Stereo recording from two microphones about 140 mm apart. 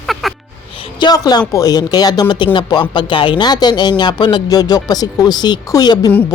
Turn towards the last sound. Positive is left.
turn(degrees=30)  # may be behind; listen again after turning